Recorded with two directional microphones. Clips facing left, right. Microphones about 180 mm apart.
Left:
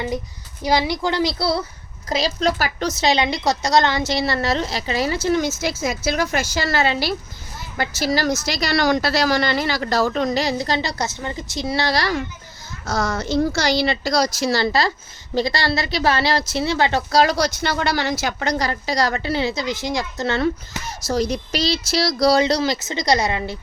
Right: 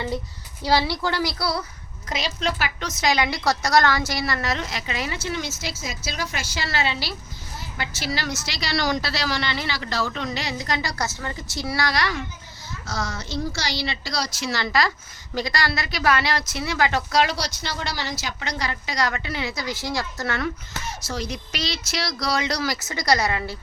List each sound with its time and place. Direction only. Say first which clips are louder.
0.6 s a woman's voice: left 2 dB; 15° left (ahead or behind); by 12.2 s 35° left (ahead or behind)
12.8 s a woman's voice: left 8 dB; 50° left (ahead or behind); by 23.6 s 20° left (ahead or behind)